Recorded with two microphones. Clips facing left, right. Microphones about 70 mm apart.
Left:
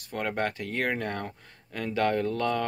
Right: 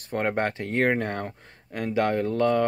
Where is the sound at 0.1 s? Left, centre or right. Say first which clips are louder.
Right 4 dB; right.